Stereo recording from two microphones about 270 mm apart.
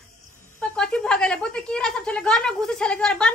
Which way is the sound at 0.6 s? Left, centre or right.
Centre.